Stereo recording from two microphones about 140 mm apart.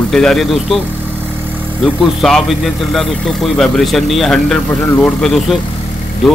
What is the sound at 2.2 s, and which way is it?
Speech, centre (ahead or behind).